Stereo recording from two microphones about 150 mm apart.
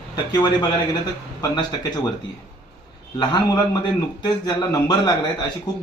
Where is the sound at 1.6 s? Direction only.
25° left (ahead or behind).